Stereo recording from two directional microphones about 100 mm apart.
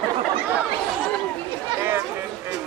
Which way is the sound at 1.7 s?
25° right (ahead or behind).